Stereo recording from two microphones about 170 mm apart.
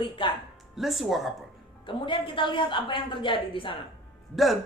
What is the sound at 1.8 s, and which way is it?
A woman's voice, 30° left (ahead or behind).